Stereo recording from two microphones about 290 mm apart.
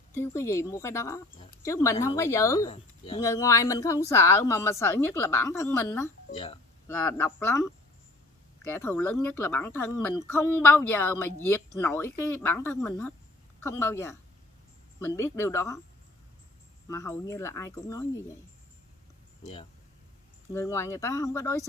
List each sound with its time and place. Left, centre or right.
0.1 s a woman's voice: centre
16.9 s a woman's voice: centre
19.4 s a woman's voice: centre